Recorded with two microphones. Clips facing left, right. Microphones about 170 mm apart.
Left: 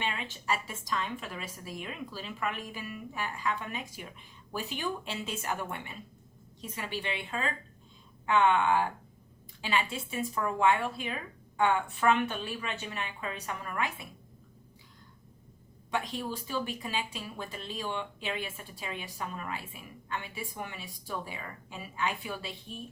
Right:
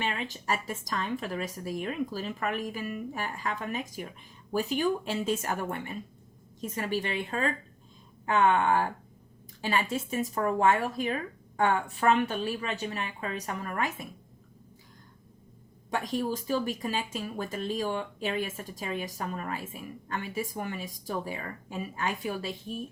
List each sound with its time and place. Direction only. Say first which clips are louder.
0.0 s a woman's voice: right 3 dB; 40° right (ahead or behind)
15.9 s speech: right 4 dB; 45° right (ahead or behind)